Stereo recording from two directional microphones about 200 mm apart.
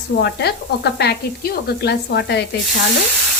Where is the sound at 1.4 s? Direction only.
50° left (ahead or behind).